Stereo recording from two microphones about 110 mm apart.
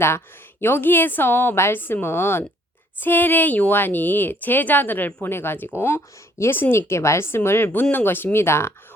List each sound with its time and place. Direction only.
0.6 s speech: 20° left (ahead or behind)